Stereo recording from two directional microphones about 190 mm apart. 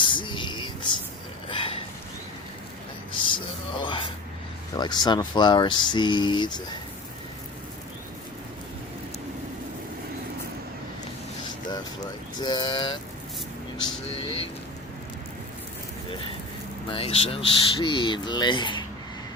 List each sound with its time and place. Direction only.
0.0 s music: 25° left (ahead or behind)
1.5 s a sound: 30° left (ahead or behind)
3.2 s music: 25° left (ahead or behind)
4.8 s speech: 20° left (ahead or behind)
12.4 s speech: 20° left (ahead or behind)
14.2 s vehicle: 30° left (ahead or behind)
16.9 s speech: 30° left (ahead or behind)